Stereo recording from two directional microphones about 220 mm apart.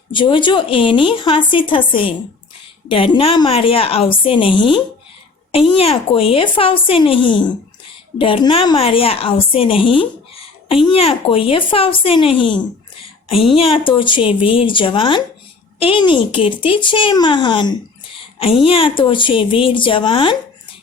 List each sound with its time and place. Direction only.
0.1 s speech: 20° left (ahead or behind)